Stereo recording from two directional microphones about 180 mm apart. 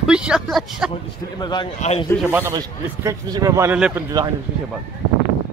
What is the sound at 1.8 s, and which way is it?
Speech, 35° left (ahead or behind).